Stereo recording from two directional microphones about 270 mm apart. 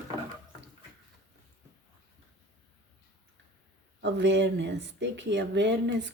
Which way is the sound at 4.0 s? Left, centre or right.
Right.